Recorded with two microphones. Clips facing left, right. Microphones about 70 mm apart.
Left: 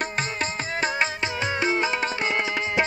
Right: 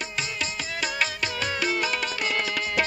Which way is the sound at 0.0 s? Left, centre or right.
Left.